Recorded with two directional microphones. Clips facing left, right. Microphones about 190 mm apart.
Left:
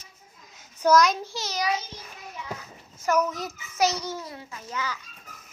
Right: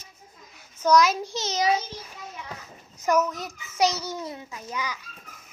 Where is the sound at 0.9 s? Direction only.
Centre (ahead or behind).